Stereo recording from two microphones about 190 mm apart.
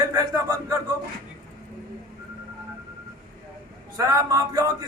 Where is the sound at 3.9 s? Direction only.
15° right (ahead or behind).